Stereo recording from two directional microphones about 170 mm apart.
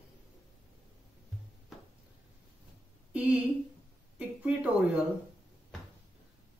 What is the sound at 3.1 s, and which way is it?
A woman's voice, 10° right (ahead or behind).